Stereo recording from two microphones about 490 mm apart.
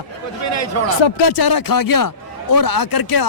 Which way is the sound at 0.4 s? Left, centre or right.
Left.